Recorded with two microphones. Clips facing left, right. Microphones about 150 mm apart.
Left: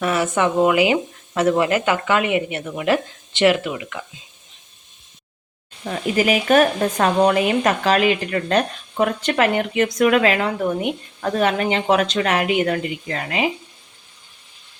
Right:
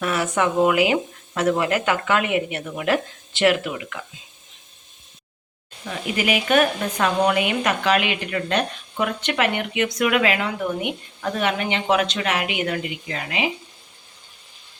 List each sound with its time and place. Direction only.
0.0 s speech: centre (ahead or behind)
5.8 s speech: 40° left (ahead or behind)